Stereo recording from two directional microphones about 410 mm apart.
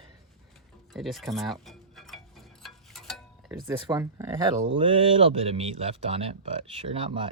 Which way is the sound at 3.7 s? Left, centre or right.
Centre.